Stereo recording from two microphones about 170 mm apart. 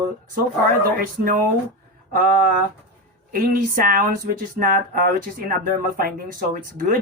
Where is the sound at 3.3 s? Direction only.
55° right (ahead or behind).